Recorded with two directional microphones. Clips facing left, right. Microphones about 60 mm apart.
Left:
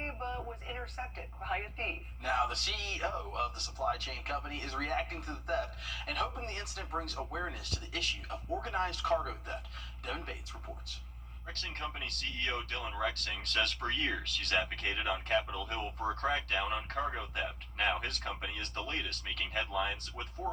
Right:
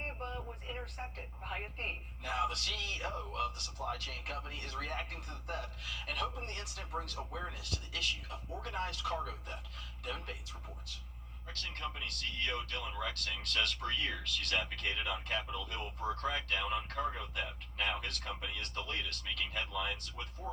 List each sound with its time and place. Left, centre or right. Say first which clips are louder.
1.5 s speech: left 4 dB; left
11.5 s speech: left 1 dB; left